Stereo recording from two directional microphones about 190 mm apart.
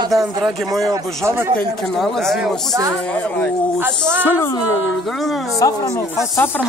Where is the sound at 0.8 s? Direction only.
15° right (ahead or behind).